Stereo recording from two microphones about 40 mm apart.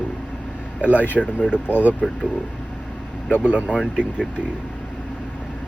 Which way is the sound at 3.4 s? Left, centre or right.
Right.